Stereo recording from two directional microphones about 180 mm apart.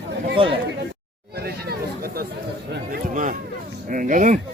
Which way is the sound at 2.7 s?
50° right (ahead or behind).